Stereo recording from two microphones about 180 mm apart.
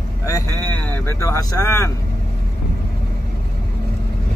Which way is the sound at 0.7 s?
10° left (ahead or behind).